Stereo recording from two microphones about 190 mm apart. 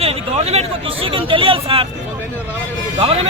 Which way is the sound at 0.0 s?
35° right (ahead or behind).